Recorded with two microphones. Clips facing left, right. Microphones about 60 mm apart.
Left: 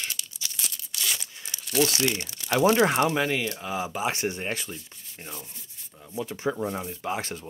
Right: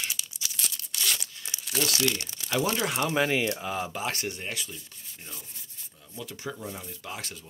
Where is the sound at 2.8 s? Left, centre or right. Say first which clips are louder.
Left 7 dB; left.